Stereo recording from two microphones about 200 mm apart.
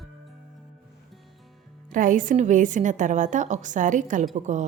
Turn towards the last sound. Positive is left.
turn(degrees=-35)  # may be behind; listen again after turning